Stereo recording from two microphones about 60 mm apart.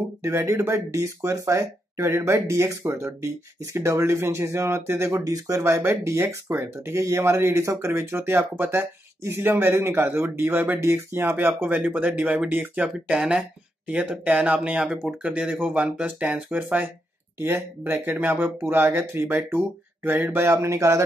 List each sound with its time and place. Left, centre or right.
0.2 s speech: right
5.2 s speech: right
5.6 s speech: right
11.7 s speech: right
12.8 s speech: centre; by 20.4 s right
20.6 s speech: right